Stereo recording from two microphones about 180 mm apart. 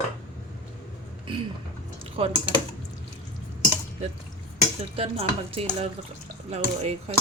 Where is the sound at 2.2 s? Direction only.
30° right (ahead or behind).